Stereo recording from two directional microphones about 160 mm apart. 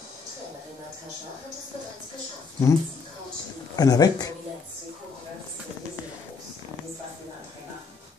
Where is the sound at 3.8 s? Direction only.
25° left (ahead or behind).